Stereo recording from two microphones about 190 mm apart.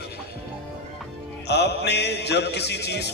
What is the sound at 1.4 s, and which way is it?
A man's voice, 60° left (ahead or behind).